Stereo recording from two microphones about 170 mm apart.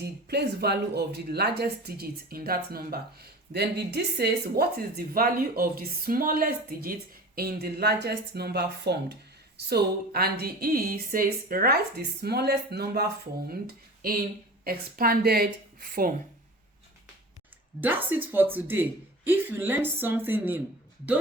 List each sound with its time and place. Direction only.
0.0 s speech: 75° right (ahead or behind)
9.6 s speech: 65° right (ahead or behind)
17.7 s speech: 10° right (ahead or behind)